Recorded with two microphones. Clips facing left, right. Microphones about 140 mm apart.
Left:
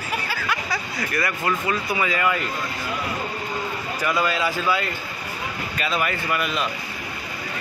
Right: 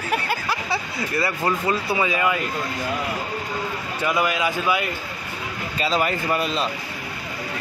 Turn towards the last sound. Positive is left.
turn(degrees=-30)  # may be behind; listen again after turning